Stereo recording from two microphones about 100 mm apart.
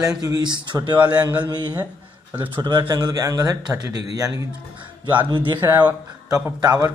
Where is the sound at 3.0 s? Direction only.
35° right (ahead or behind).